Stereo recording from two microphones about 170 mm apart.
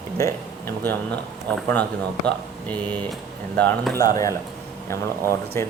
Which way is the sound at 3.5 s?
10° left (ahead or behind).